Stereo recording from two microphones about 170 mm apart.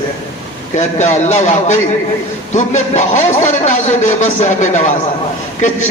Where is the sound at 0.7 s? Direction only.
45° left (ahead or behind).